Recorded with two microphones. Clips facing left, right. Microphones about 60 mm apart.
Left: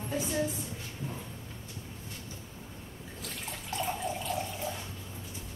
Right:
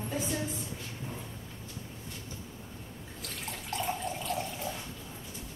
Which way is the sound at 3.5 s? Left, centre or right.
Centre.